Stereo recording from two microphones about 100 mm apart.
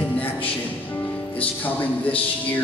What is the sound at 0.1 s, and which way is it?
Music, 15° left (ahead or behind).